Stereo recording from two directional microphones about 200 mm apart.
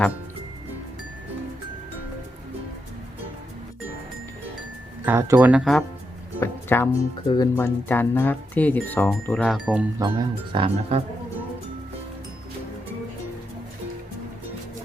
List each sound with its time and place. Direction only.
5.0 s speech: 10° right (ahead or behind)
6.4 s speech: 10° left (ahead or behind)
10.0 s speech: 20° right (ahead or behind)